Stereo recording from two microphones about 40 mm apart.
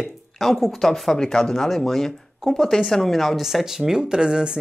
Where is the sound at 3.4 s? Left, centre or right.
Centre.